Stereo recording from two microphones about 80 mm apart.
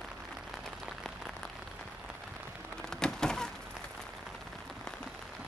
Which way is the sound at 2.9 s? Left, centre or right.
Centre.